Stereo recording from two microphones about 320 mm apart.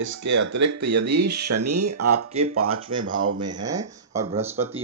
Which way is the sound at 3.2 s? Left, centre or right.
Right.